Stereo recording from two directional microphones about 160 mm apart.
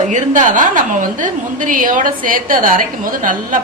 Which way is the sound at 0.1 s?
55° right (ahead or behind).